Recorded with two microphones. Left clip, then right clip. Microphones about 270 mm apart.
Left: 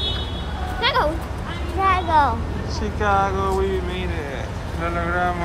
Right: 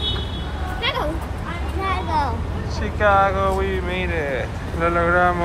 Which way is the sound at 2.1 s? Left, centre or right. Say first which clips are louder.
Left 5 dB; centre.